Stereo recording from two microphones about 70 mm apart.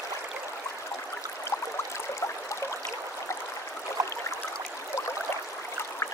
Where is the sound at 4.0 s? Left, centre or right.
Right.